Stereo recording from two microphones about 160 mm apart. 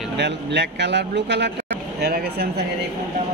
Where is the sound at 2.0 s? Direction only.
75° right (ahead or behind).